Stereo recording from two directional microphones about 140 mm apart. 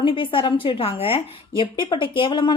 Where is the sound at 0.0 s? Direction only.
40° left (ahead or behind).